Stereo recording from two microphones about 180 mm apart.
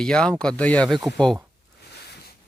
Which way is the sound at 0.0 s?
5° left (ahead or behind).